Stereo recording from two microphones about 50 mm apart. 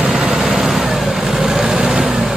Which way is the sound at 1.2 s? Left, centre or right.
Centre.